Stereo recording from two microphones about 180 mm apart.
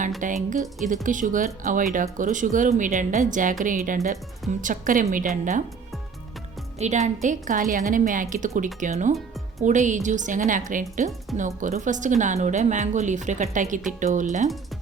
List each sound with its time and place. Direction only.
0.2 s speech: 45° right (ahead or behind)
6.7 s speech: 40° right (ahead or behind)